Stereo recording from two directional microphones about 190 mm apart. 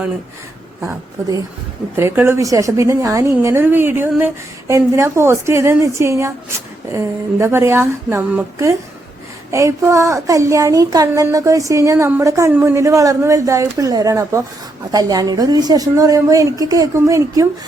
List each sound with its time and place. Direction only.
2.0 s a woman's voice: 10° right (ahead or behind)